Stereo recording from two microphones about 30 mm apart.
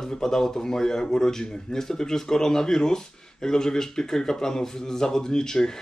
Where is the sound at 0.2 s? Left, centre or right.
Centre.